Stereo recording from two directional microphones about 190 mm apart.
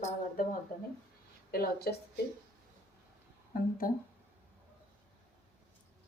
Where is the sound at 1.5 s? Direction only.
50° left (ahead or behind).